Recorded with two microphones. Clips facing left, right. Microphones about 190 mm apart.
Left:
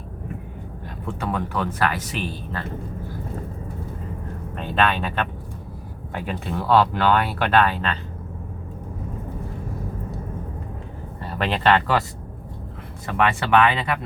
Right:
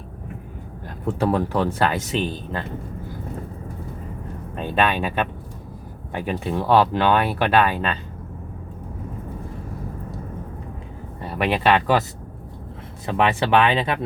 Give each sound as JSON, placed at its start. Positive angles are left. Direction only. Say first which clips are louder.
{"t": 1.2, "sound": "speech", "louder": "right 5 dB", "side_deg": -35}
{"t": 4.5, "sound": "speech", "louder": "right 1 dB", "side_deg": -15}
{"t": 6.2, "sound": "speech", "louder": "right 2 dB", "side_deg": -15}
{"t": 11.3, "sound": "speech", "louder": "right 1 dB", "side_deg": -10}
{"t": 13.1, "sound": "speech", "louder": "right 1 dB", "side_deg": -20}